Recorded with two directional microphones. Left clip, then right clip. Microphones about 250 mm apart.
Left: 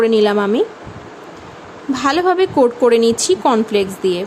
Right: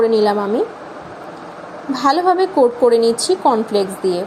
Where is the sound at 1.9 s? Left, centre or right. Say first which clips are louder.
Right 1 dB; centre.